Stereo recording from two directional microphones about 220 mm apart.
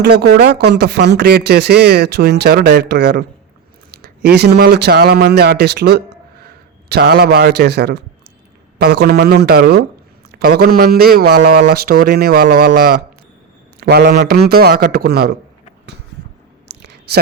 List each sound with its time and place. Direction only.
0.0 s a man's voice: 45° right (ahead or behind)